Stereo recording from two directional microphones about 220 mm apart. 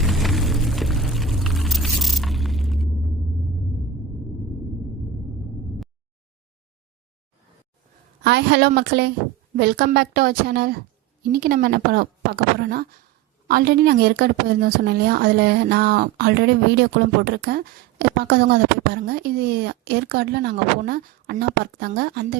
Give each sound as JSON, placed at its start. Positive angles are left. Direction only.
{"t": 0.0, "sound": "vehicle", "side_deg": 0}
{"t": 8.2, "sound": "a woman's voice", "side_deg": -50}